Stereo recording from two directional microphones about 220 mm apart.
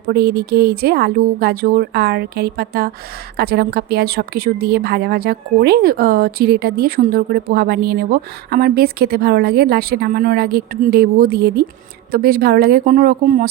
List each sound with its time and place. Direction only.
0.1 s a woman's voice: 45° right (ahead or behind)